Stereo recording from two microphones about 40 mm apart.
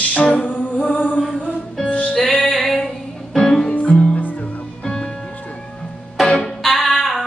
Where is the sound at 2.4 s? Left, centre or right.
Centre.